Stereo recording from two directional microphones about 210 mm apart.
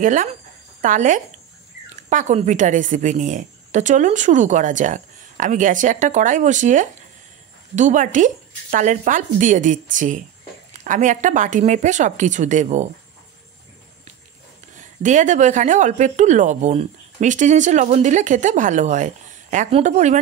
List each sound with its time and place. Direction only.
0.0 s speech: 35° right (ahead or behind)
14.8 s speech: 35° right (ahead or behind)